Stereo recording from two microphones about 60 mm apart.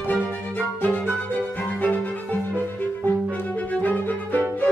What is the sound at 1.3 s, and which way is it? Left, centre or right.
Violin, left.